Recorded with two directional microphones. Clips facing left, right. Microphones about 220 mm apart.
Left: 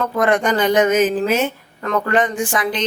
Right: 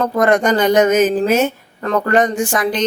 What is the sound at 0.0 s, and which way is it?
A woman's voice, 40° right (ahead or behind).